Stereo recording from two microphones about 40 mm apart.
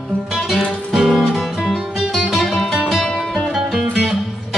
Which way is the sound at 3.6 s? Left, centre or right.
Centre.